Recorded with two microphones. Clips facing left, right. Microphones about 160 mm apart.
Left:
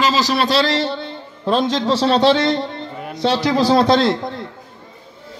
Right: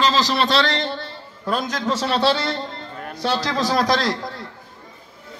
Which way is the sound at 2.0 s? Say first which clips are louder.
Left 6 dB; 25° left (ahead or behind).